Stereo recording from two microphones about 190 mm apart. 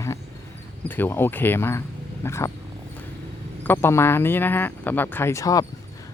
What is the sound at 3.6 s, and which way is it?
Speech, 10° left (ahead or behind).